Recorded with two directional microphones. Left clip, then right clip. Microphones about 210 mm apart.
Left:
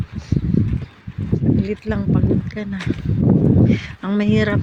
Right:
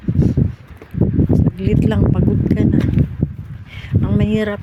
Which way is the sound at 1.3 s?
20° right (ahead or behind).